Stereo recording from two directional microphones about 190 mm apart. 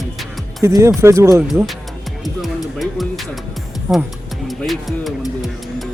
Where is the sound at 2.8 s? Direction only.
Centre (ahead or behind).